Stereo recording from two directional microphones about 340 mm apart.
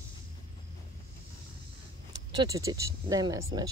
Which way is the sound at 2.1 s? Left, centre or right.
Centre.